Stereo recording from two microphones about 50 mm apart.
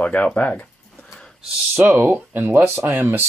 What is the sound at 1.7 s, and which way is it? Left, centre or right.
Speech, right.